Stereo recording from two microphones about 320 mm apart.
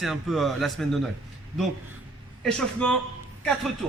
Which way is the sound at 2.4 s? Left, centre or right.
Centre.